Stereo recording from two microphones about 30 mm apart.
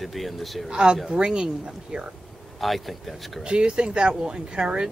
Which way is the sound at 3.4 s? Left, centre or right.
Right.